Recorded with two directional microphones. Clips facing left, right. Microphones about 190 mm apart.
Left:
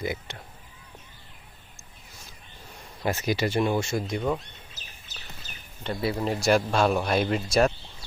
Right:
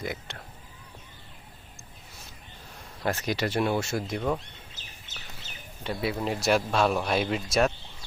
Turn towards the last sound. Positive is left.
turn(degrees=0)  # may be behind; listen again after turning